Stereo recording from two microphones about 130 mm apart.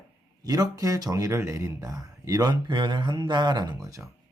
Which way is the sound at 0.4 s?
30° right (ahead or behind).